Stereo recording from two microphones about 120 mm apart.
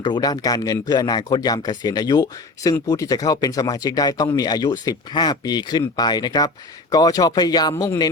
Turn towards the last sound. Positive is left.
turn(degrees=25)  # may be behind; listen again after turning